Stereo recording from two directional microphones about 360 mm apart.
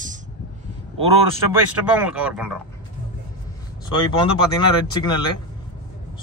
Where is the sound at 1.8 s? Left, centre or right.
Centre.